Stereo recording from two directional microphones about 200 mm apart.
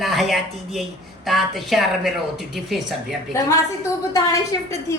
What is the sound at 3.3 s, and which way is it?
A woman's voice, 15° left (ahead or behind).